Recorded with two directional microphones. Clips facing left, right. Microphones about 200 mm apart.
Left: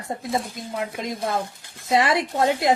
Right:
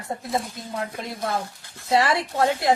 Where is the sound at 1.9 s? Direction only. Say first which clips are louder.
Left 1 dB; 20° left (ahead or behind).